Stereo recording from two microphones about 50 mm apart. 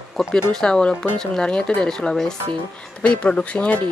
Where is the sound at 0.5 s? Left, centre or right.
Centre.